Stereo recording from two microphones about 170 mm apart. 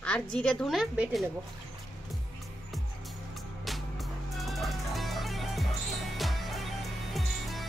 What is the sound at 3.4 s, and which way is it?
Music, centre (ahead or behind).